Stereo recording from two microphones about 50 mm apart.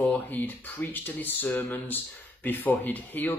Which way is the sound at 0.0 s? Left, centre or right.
Left.